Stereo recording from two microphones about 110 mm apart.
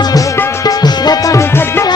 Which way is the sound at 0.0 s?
35° left (ahead or behind).